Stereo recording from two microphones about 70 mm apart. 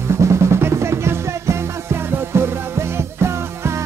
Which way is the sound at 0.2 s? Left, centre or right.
Right.